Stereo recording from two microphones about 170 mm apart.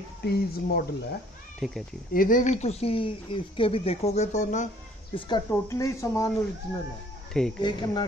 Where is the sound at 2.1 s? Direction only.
55° left (ahead or behind).